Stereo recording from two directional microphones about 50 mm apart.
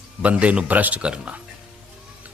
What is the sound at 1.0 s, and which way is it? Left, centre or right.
Speech, right.